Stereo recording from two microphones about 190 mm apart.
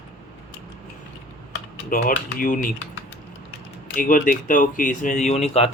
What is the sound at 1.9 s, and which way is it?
Speech, 45° left (ahead or behind).